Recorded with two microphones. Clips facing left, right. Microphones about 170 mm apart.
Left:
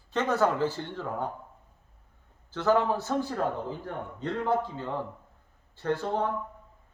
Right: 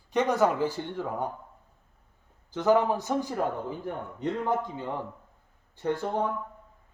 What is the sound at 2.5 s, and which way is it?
A man's voice, 15° right (ahead or behind).